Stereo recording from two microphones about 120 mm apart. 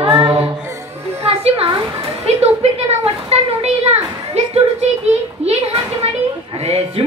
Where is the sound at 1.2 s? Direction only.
60° right (ahead or behind).